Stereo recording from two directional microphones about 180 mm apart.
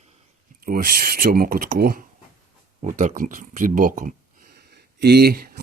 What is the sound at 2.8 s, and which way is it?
Speech, 40° right (ahead or behind).